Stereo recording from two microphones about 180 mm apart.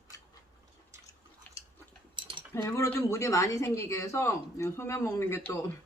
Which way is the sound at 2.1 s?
25° right (ahead or behind).